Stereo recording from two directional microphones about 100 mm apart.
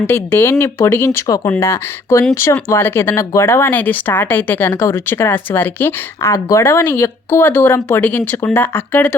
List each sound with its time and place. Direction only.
0.1 s speech: 20° left (ahead or behind)